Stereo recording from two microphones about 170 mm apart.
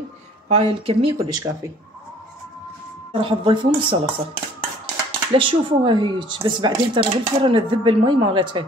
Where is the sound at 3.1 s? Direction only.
30° right (ahead or behind).